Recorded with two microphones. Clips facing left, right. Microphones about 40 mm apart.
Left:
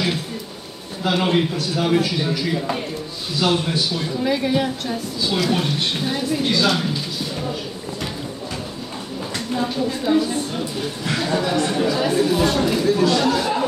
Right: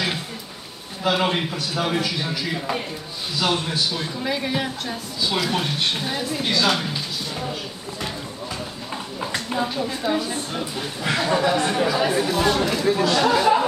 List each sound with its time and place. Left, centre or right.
1.0 s a man's voice: centre
9.6 s speech: centre
12.8 s speech: centre